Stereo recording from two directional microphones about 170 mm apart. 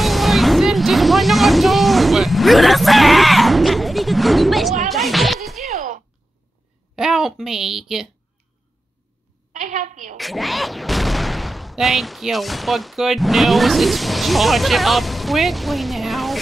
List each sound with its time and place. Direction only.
0.0 s vehicle: centre (ahead or behind)
7.0 s speech: centre (ahead or behind)
9.5 s a woman's voice: 50° right (ahead or behind)
10.1 s speech: centre (ahead or behind)